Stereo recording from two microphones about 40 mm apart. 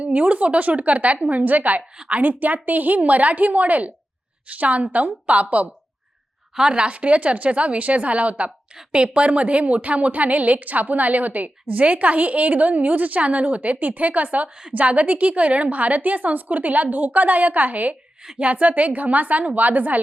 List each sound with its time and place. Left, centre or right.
0.0 s a woman's voice: right
6.6 s a woman's voice: right